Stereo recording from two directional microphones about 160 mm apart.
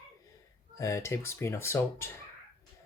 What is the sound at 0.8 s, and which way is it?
Speech, 20° left (ahead or behind).